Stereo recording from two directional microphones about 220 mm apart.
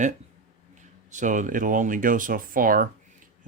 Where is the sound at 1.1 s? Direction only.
35° right (ahead or behind).